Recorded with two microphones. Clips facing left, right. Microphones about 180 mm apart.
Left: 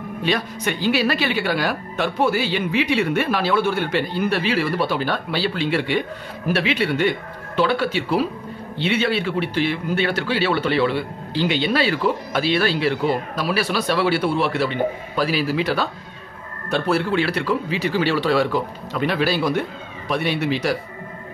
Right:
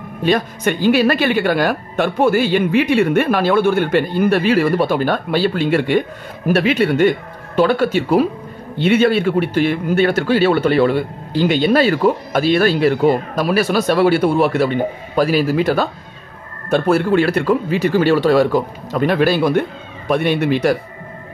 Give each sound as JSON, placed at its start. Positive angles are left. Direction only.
{"t": 0.2, "sound": "speech", "side_deg": -50}